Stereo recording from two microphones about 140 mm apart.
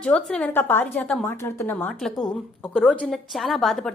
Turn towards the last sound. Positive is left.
turn(degrees=0)  # may be behind; listen again after turning